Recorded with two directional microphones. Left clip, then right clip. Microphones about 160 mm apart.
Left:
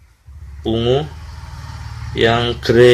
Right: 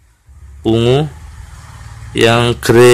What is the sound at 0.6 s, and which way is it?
Speech, 45° right (ahead or behind).